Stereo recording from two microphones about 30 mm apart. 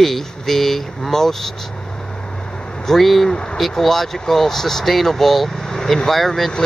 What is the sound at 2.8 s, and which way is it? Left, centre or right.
Speech, centre.